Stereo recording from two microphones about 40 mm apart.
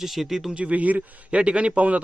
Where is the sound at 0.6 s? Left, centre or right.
Right.